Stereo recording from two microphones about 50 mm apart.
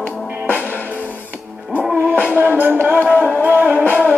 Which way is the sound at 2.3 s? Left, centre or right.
Right.